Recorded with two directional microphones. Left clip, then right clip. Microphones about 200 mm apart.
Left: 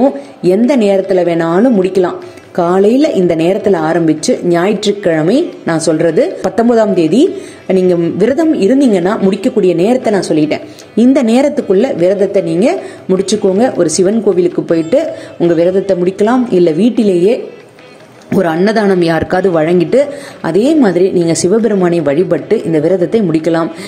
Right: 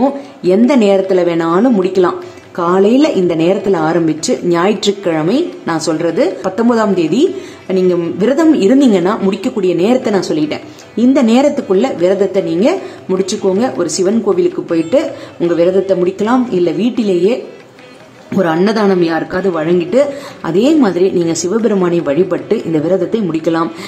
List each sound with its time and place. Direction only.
0.7 s a woman's voice: 15° left (ahead or behind)
18.4 s a woman's voice: 20° left (ahead or behind)
18.9 s a woman's voice: 30° left (ahead or behind)